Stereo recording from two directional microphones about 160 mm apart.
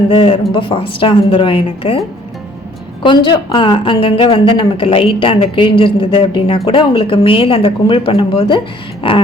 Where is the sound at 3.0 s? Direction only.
30° left (ahead or behind).